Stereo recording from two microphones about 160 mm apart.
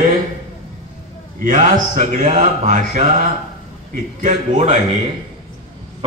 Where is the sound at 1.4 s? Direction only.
50° right (ahead or behind).